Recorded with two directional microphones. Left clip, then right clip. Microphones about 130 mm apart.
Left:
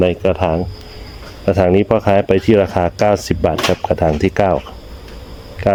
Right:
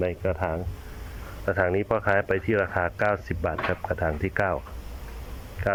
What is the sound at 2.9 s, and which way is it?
Speech, 40° left (ahead or behind).